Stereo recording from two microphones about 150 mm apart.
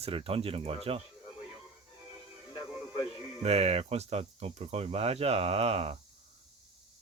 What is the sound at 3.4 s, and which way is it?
Speech, 45° right (ahead or behind).